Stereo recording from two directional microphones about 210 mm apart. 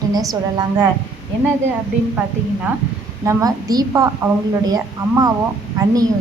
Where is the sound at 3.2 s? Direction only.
15° right (ahead or behind).